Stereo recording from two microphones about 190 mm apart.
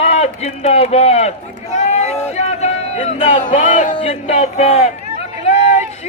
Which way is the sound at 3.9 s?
30° left (ahead or behind).